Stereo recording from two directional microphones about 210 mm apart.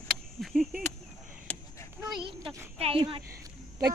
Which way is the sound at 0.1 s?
Centre (ahead or behind).